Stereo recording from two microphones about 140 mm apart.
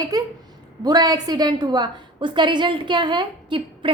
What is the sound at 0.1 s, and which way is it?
A woman's voice, 25° right (ahead or behind).